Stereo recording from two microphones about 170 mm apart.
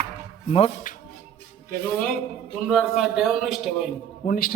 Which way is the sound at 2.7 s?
Centre (ahead or behind).